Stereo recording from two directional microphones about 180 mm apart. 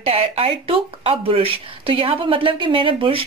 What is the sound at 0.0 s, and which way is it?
Speech, 35° right (ahead or behind).